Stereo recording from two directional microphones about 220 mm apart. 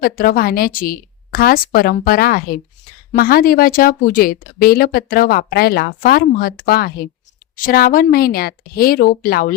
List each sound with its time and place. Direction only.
0.0 s a woman's voice: 40° left (ahead or behind)